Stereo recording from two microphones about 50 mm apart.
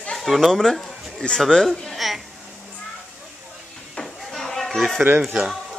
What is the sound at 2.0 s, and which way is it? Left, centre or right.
Speech, centre.